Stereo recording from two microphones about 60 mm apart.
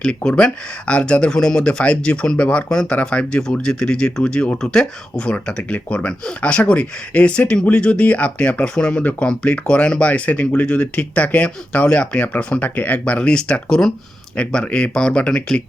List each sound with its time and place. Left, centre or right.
0.0 s speech: centre
4.5 s speech: centre; by 13.1 s left
13.1 s speech: centre